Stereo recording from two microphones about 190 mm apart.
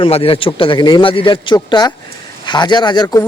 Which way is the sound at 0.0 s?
30° left (ahead or behind).